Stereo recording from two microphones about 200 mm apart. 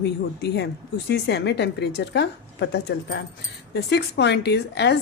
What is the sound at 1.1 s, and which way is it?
Speech, 55° left (ahead or behind).